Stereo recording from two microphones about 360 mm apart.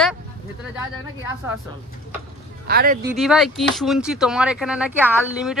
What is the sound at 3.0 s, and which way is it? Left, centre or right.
Speech, centre.